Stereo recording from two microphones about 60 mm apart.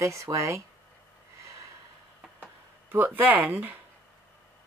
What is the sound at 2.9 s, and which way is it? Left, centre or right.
Speech, right.